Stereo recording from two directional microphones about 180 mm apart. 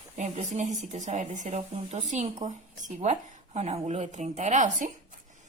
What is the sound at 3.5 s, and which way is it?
Speech, 35° right (ahead or behind).